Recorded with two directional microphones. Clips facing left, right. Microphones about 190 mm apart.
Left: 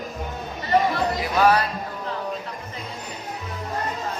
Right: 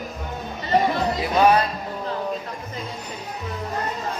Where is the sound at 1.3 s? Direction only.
20° right (ahead or behind).